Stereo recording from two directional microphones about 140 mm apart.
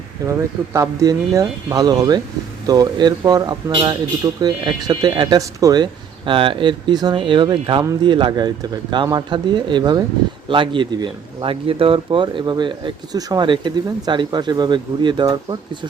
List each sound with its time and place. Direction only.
0.3 s speech: 20° right (ahead or behind)